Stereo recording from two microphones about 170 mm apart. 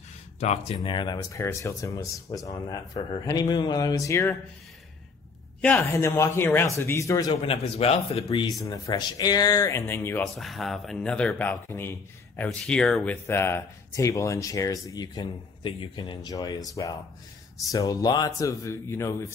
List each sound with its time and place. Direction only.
0.4 s speech: 40° left (ahead or behind)
0.7 s speech: 25° left (ahead or behind)
5.6 s speech: 10° left (ahead or behind)
7.4 s speech: 40° left (ahead or behind)
8.5 s speech: 20° left (ahead or behind)
10.2 s speech: centre (ahead or behind); by 16.6 s 20° left (ahead or behind)
17.6 s speech: 20° left (ahead or behind)